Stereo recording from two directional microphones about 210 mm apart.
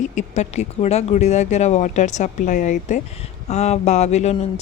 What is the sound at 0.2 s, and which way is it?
Speech, 35° left (ahead or behind).